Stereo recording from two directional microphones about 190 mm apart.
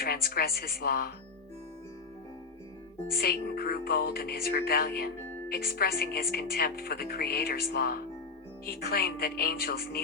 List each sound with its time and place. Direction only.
0.0 s speech: 55° left (ahead or behind)
3.1 s speech: 55° left (ahead or behind)